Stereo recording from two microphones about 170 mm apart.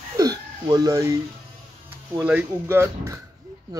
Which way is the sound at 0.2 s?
20° right (ahead or behind).